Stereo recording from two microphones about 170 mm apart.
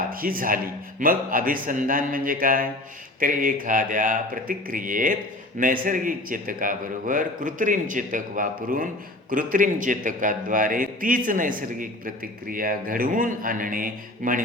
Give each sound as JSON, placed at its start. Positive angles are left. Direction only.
{"t": 0.1, "sound": "a man's voice", "side_deg": -55}